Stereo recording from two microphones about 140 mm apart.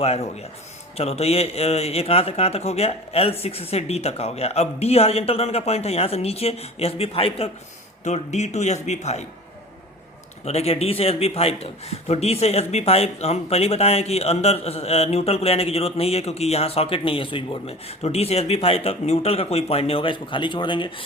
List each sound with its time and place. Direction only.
0.0 s a man's voice: 50° left (ahead or behind)
10.4 s a man's voice: 50° left (ahead or behind)